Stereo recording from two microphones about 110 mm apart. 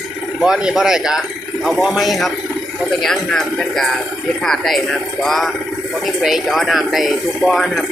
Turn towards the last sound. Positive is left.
turn(degrees=0)  # may be behind; listen again after turning